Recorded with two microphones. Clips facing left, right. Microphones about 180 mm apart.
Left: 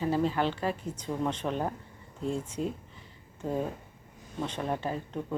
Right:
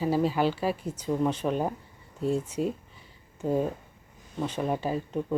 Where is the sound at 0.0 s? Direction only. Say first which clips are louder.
Right 3 dB; 10° right (ahead or behind).